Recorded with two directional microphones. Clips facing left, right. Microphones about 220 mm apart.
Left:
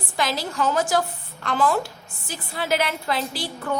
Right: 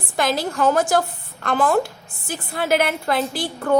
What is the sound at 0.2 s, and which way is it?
A woman's voice, 50° right (ahead or behind).